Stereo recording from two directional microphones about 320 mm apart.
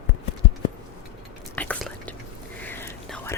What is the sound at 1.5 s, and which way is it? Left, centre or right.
Whispering, centre.